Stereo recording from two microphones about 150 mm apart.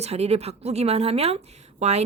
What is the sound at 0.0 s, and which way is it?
Speech, 45° right (ahead or behind).